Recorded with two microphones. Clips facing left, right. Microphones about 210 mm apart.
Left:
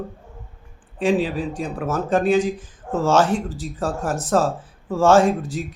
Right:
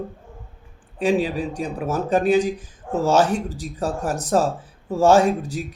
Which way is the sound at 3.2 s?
40° right (ahead or behind).